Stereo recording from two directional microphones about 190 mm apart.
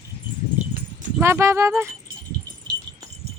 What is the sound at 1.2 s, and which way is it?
Speech, 15° right (ahead or behind).